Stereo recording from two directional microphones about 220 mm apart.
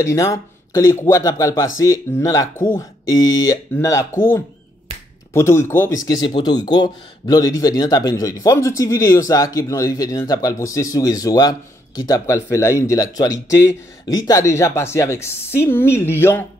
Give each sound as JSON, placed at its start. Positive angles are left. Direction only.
{"t": 0.0, "sound": "speech", "side_deg": 15}